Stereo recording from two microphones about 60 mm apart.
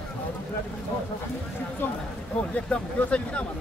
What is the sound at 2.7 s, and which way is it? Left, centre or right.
Speech, left.